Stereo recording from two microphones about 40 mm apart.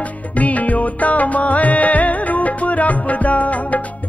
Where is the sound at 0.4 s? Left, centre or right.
Left.